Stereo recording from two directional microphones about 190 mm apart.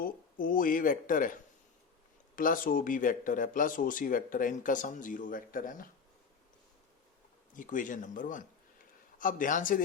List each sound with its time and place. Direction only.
0.0 s speech: 45° left (ahead or behind)
7.5 s speech: 45° left (ahead or behind)